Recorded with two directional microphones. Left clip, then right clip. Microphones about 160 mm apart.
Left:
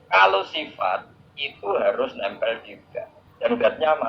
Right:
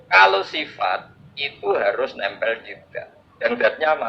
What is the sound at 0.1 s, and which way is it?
A man's voice, 25° right (ahead or behind).